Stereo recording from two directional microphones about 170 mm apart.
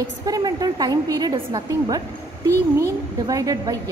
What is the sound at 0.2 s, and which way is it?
A woman's voice, 20° right (ahead or behind).